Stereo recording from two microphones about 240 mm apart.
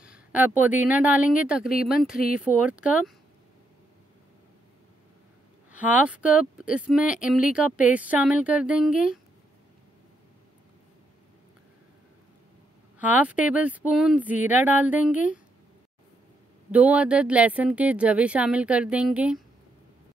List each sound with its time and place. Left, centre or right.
0.0 s speech: centre
5.7 s speech: centre
13.0 s speech: centre
16.7 s speech: centre